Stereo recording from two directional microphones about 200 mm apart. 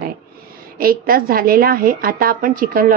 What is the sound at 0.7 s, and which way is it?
A woman's voice, 45° right (ahead or behind).